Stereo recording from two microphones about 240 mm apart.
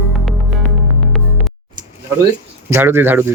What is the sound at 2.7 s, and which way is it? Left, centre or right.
Speech, centre.